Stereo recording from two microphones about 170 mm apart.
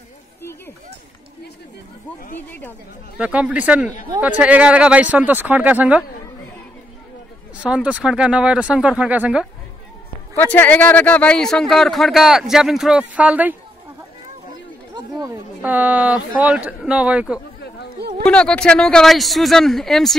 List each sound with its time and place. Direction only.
3.2 s speech: 5° right (ahead or behind)
7.5 s speech: 5° right (ahead or behind)
10.3 s speech: 10° left (ahead or behind); by 13.6 s 10° right (ahead or behind)
15.0 s speech: 20° right (ahead or behind)
15.6 s speech: 10° right (ahead or behind)
18.2 s speech: 5° left (ahead or behind)